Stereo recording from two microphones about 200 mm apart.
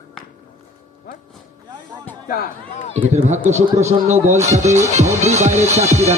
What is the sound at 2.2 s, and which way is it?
Speech, 45° left (ahead or behind).